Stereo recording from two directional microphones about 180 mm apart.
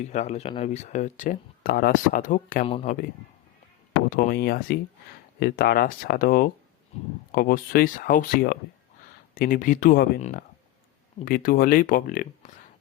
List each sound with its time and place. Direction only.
0.0 s speech: 40° left (ahead or behind)
2.6 s speech: 30° left (ahead or behind)
4.1 s speech: 55° left (ahead or behind)
10.2 s speech: 40° left (ahead or behind)